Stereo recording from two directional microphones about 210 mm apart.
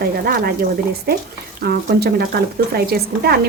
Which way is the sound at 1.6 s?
50° right (ahead or behind).